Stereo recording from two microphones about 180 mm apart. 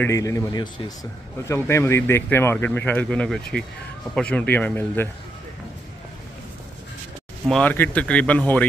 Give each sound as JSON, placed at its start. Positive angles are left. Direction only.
{"t": 0.0, "sound": "speech", "side_deg": 15}
{"t": 7.4, "sound": "speech", "side_deg": 5}